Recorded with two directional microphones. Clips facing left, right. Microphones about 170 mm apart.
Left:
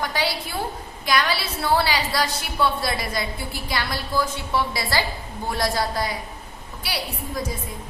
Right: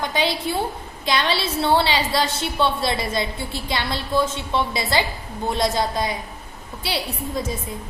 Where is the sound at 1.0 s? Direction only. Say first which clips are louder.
Right 1 dB; 25° right (ahead or behind).